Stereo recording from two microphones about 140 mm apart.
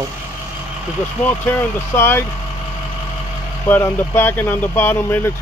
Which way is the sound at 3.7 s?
15° left (ahead or behind).